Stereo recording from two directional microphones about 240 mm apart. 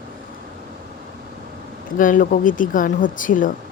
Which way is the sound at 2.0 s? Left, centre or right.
Left.